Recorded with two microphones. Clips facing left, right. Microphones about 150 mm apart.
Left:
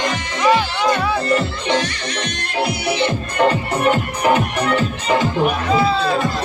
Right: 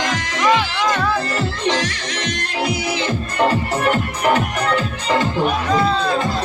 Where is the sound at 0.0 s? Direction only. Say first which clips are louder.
Even; 90° right.